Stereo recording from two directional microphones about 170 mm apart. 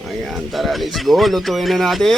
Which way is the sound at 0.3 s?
Centre (ahead or behind).